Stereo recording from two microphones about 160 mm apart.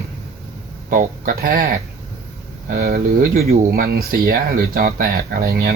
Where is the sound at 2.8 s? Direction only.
75° right (ahead or behind).